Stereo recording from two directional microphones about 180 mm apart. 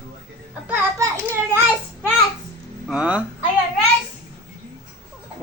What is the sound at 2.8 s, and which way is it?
Speech, 5° right (ahead or behind).